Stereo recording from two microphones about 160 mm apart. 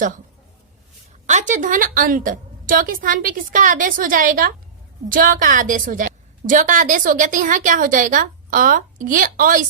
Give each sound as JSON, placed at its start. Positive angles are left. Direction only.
{"t": 1.3, "sound": "a woman's voice", "side_deg": -50}